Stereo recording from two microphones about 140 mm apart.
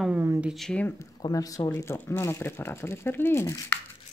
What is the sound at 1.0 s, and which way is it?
Speech, 25° left (ahead or behind).